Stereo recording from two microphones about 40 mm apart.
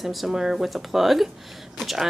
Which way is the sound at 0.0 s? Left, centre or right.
Centre.